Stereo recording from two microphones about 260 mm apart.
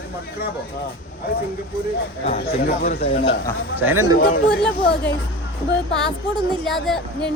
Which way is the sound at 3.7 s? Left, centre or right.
Centre.